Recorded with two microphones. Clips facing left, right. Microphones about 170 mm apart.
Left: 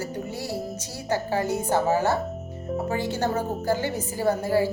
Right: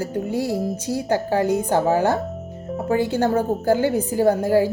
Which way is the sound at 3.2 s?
55° right (ahead or behind).